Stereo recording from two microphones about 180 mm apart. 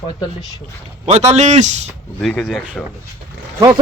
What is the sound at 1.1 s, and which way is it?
Speech, 35° right (ahead or behind).